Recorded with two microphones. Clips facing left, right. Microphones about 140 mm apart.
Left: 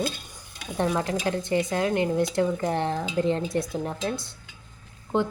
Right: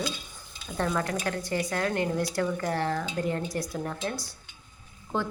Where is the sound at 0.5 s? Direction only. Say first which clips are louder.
Left 4 dB; 70° left (ahead or behind).